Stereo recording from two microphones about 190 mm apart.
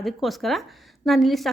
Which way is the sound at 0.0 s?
Centre (ahead or behind).